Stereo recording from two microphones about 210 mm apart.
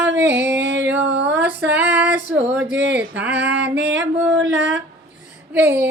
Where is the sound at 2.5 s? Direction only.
55° right (ahead or behind).